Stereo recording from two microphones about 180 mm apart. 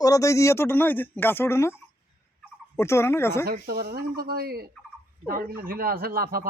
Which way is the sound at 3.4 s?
60° right (ahead or behind).